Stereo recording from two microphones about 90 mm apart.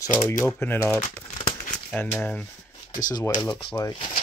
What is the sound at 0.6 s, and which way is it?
Speech, 25° left (ahead or behind).